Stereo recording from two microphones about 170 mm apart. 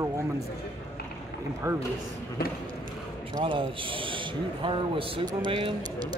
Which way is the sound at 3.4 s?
30° right (ahead or behind).